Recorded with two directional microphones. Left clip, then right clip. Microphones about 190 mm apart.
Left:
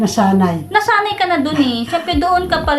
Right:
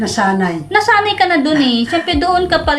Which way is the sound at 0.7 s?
5° right (ahead or behind).